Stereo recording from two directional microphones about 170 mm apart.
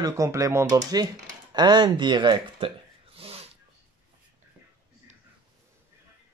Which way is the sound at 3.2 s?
35° right (ahead or behind).